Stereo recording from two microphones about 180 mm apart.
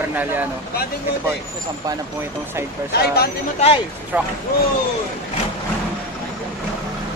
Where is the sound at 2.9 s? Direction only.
65° left (ahead or behind).